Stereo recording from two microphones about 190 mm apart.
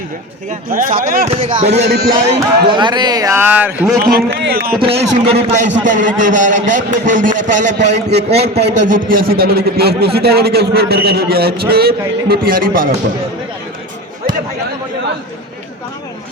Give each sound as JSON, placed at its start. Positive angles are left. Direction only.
{"t": 0.8, "sound": "speech", "side_deg": -45}
{"t": 1.3, "sound": "a man's voice", "side_deg": -30}
{"t": 4.3, "sound": "a man's voice", "side_deg": -60}
{"t": 4.8, "sound": "a man's voice", "side_deg": -30}
{"t": 7.8, "sound": "a man's voice", "side_deg": -60}
{"t": 8.3, "sound": "a man's voice", "side_deg": -35}
{"t": 8.6, "sound": "a man's voice", "side_deg": -65}
{"t": 8.9, "sound": "a man's voice", "side_deg": -50}